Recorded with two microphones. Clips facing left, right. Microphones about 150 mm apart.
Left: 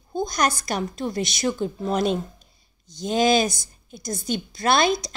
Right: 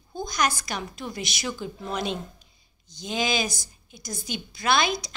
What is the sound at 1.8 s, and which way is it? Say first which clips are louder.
A woman's voice: left 7 dB; 45° left (ahead or behind).